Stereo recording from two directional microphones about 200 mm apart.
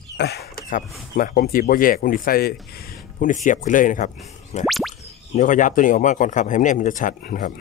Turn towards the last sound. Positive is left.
turn(degrees=40)  # may be behind; listen again after turning